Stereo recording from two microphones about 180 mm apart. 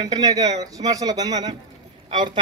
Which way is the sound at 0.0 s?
20° right (ahead or behind).